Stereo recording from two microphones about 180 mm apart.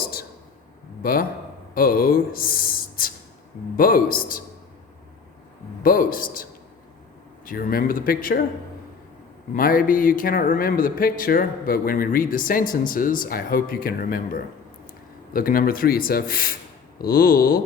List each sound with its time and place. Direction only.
0.0 s a sound: 60° left (ahead or behind)
1.0 s speech: 55° left (ahead or behind)
5.8 s speech: 50° left (ahead or behind)
9.6 s speech: 50° left (ahead or behind)